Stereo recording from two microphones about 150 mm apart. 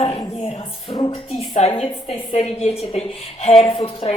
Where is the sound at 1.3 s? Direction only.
45° left (ahead or behind).